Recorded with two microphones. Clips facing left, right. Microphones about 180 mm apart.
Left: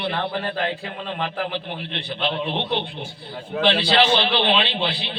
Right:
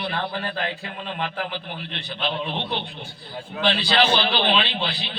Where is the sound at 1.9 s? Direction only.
25° left (ahead or behind).